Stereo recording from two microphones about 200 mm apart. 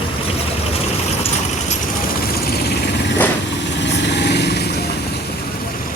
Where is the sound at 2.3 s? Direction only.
50° left (ahead or behind).